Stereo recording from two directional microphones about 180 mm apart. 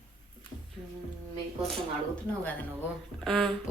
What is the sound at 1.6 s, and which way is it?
Speech, centre (ahead or behind).